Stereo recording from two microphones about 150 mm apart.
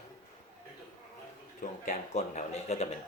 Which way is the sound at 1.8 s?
50° left (ahead or behind).